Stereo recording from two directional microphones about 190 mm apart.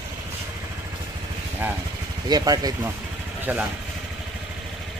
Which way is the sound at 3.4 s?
10° right (ahead or behind).